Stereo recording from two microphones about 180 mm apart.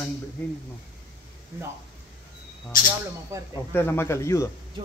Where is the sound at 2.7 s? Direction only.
50° left (ahead or behind).